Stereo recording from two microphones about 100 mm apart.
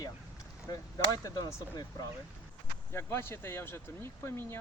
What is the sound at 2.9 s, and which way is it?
Speech, 25° left (ahead or behind).